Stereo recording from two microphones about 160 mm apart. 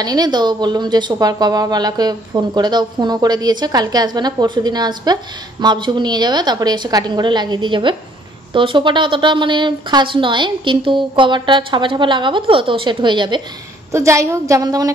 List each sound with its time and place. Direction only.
0.0 s speech: 25° right (ahead or behind)
13.9 s speech: 20° right (ahead or behind)